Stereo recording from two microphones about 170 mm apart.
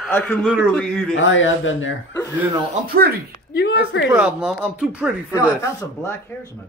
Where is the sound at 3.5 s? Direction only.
70° left (ahead or behind).